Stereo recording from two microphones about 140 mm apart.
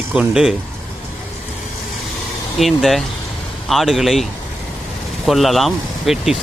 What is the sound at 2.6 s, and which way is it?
Speech, centre (ahead or behind).